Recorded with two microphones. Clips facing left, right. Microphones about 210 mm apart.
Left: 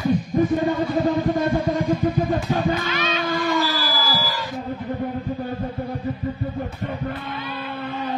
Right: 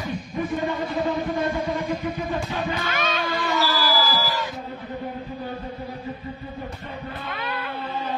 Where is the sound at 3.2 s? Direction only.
50° left (ahead or behind).